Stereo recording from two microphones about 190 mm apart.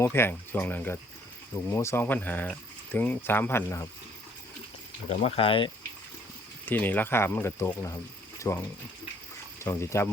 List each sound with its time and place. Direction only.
0.0 s speech: 10° left (ahead or behind)
5.0 s speech: 30° left (ahead or behind)
6.7 s speech: 10° left (ahead or behind)
9.6 s speech: 15° left (ahead or behind)